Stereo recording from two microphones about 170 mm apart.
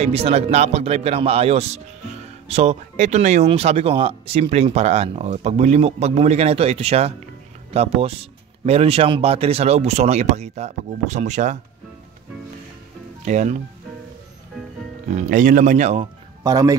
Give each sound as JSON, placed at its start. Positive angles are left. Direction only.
{"t": 0.0, "sound": "speech", "side_deg": -35}
{"t": 13.2, "sound": "speech", "side_deg": -45}
{"t": 15.0, "sound": "speech", "side_deg": -45}
{"t": 16.4, "sound": "speech", "side_deg": -20}